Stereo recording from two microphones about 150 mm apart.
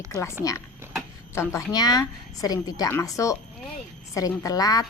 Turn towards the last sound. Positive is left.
turn(degrees=25)  # may be behind; listen again after turning